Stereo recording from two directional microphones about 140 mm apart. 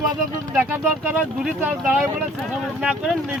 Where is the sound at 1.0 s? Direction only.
10° right (ahead or behind).